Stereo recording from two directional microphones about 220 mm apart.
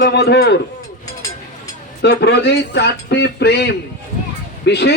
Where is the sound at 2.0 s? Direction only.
50° left (ahead or behind).